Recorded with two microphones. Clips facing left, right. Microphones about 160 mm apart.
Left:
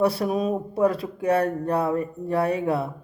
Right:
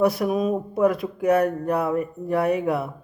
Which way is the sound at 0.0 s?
30° left (ahead or behind).